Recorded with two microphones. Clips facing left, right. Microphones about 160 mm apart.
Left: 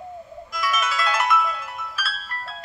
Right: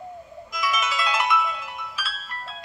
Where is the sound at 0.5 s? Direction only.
15° right (ahead or behind).